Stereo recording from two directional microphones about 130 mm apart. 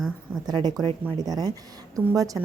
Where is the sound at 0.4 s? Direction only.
30° right (ahead or behind).